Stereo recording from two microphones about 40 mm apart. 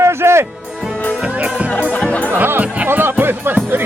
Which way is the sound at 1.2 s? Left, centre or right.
Right.